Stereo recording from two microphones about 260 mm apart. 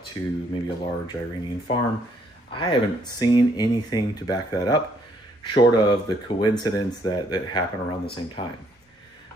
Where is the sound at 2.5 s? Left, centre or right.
Centre.